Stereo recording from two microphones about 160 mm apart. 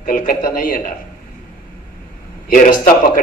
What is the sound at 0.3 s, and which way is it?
Speech, 60° left (ahead or behind).